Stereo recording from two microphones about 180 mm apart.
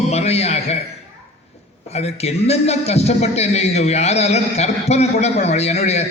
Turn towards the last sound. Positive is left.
turn(degrees=35)  # may be behind; listen again after turning